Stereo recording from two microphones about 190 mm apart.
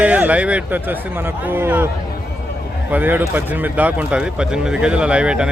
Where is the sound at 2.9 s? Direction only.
10° right (ahead or behind).